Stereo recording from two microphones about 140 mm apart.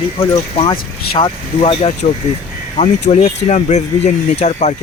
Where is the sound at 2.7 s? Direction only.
55° left (ahead or behind).